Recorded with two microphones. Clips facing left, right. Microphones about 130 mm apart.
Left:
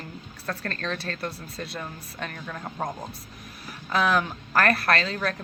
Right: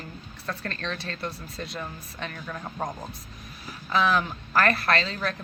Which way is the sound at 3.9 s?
50° left (ahead or behind).